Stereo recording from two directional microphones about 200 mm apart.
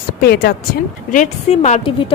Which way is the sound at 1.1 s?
35° left (ahead or behind).